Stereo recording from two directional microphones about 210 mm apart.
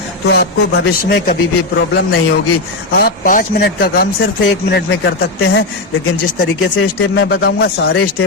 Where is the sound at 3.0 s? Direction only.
40° left (ahead or behind).